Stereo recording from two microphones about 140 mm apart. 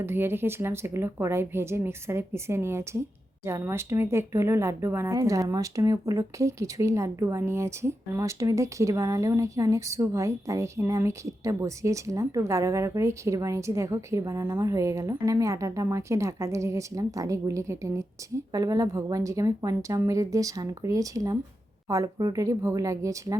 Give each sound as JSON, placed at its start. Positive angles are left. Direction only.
{"t": 0.0, "sound": "speech", "side_deg": -15}